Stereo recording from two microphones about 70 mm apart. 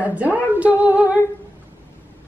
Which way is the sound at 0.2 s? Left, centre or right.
Centre.